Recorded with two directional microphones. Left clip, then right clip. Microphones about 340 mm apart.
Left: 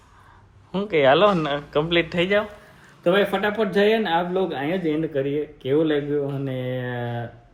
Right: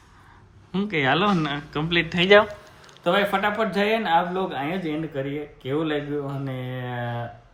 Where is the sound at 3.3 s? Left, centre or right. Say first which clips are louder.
Left 1 dB; right.